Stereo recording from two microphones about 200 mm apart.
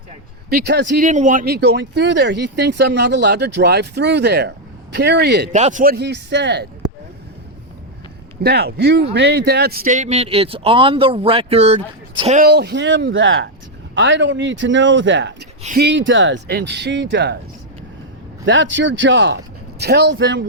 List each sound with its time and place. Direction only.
0.5 s speech: 55° right (ahead or behind)
1.0 s speech: 40° right (ahead or behind); by 5.5 s 55° right (ahead or behind)
5.5 s speech: 40° right (ahead or behind); by 6.7 s 60° right (ahead or behind)
8.4 s speech: 55° right (ahead or behind); by 12.5 s 35° right (ahead or behind)
12.5 s speech: 55° right (ahead or behind)
15.6 s speech: 50° right (ahead or behind)
18.4 s speech: 65° right (ahead or behind)